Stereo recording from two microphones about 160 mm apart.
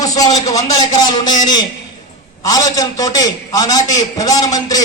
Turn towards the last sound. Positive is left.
turn(degrees=20)  # may be behind; listen again after turning